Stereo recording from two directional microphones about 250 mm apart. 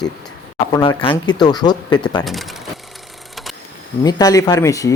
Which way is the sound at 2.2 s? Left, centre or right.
Centre.